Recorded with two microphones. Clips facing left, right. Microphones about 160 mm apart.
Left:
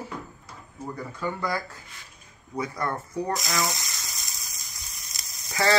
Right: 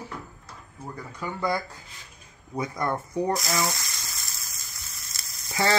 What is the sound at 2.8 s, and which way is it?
Speech, 20° right (ahead or behind).